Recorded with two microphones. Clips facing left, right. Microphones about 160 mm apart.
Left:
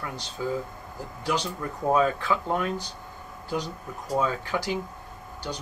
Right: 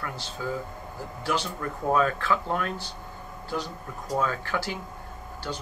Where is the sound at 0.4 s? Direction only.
15° left (ahead or behind).